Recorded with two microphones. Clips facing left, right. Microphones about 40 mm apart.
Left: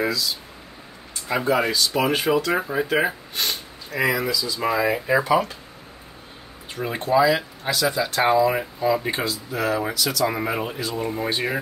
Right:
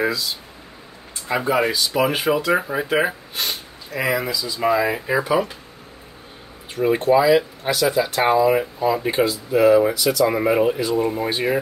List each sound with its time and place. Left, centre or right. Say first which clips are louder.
1.2 s speech: right 2 dB; centre
4.3 s speech: left 1 dB; right
4.6 s speech: right 4 dB; centre
6.7 s speech: right 5 dB; centre
9.2 s speech: right 9 dB; centre